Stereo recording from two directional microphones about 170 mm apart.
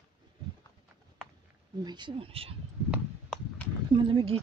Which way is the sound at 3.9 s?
30° right (ahead or behind).